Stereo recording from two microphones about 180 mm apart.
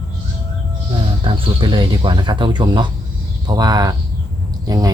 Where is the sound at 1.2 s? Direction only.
30° right (ahead or behind).